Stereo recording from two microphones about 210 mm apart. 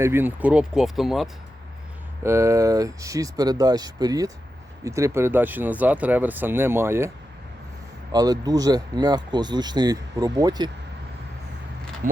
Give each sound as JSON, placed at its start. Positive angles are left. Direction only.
{"t": 0.0, "sound": "speech", "side_deg": -10}
{"t": 2.2, "sound": "speech", "side_deg": -15}
{"t": 8.1, "sound": "speech", "side_deg": -20}